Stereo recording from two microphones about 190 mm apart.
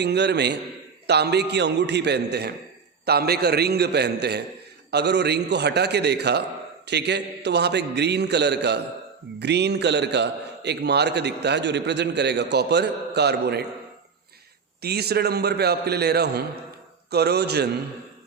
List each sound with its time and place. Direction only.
0.0 s a man's voice: 60° right (ahead or behind)
14.8 s a man's voice: 55° right (ahead or behind)